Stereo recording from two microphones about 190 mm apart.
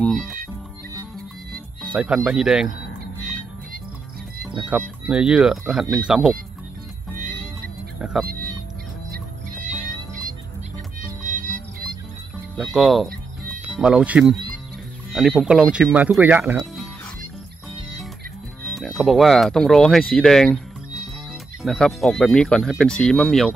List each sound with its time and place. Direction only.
0.0 s music: centre (ahead or behind)
2.0 s speech: 5° right (ahead or behind)
4.6 s speech: 5° right (ahead or behind)
8.0 s music: 5° right (ahead or behind)
11.0 s music: 45° right (ahead or behind)
12.7 s speech: centre (ahead or behind)
18.7 s speech: centre (ahead or behind)